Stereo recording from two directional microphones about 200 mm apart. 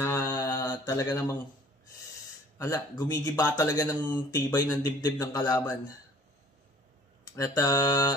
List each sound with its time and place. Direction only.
0.0 s mantra: 15° left (ahead or behind)
2.6 s speech: 15° left (ahead or behind)
7.2 s speech: 15° left (ahead or behind)